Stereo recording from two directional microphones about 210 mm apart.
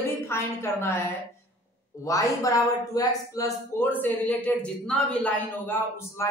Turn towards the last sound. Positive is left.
turn(degrees=10)  # may be behind; listen again after turning